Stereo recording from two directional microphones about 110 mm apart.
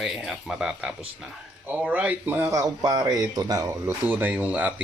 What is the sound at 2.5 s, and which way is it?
Speech, 35° right (ahead or behind).